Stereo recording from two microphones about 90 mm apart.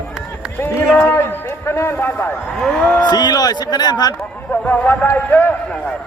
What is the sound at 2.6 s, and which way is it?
Speech, 10° left (ahead or behind).